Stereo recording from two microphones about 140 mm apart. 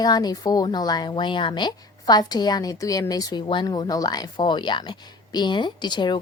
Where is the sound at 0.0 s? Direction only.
30° left (ahead or behind).